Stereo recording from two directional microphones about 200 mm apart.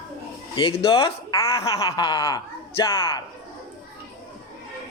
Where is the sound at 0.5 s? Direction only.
25° left (ahead or behind).